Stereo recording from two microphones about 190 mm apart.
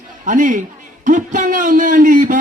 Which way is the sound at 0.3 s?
45° right (ahead or behind).